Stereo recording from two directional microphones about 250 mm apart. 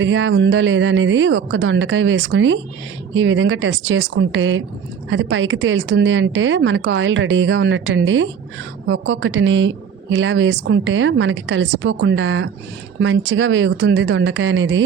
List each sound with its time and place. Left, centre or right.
0.0 s a woman's voice: right